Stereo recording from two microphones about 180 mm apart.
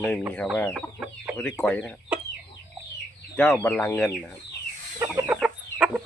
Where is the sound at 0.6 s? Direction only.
5° left (ahead or behind).